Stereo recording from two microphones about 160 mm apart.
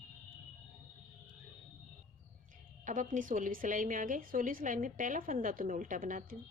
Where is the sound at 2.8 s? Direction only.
55° right (ahead or behind).